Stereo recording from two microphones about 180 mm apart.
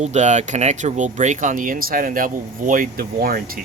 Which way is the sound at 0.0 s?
40° right (ahead or behind).